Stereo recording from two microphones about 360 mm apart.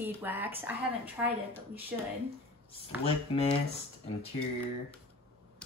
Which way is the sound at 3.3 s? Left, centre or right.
Centre.